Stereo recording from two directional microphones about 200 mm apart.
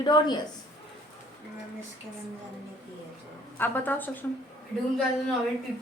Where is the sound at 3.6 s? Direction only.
10° left (ahead or behind).